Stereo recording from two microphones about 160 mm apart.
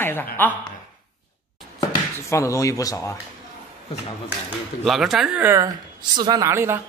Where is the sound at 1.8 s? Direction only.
20° left (ahead or behind).